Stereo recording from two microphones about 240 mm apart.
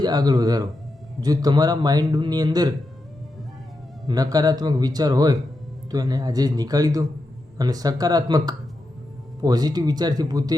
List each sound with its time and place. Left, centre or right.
0.0 s a man's voice: centre
4.0 s a man's voice: centre